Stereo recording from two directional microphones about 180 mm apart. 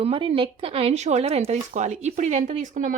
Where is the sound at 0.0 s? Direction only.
30° right (ahead or behind).